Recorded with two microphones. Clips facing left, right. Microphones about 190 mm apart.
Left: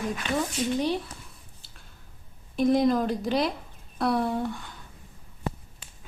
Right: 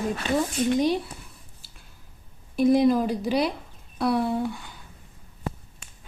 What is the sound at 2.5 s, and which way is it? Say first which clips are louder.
A woman's voice: right 3 dB; 5° right (ahead or behind).